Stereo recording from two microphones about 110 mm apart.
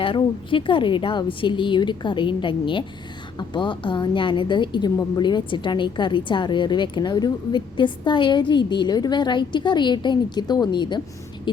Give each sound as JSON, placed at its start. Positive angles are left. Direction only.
{"t": 0.0, "sound": "a woman's voice", "side_deg": 50}